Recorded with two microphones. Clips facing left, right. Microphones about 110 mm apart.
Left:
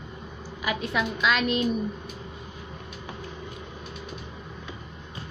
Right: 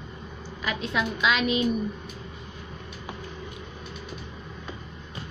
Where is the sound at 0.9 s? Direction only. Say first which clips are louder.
Right 1 dB; centre (ahead or behind).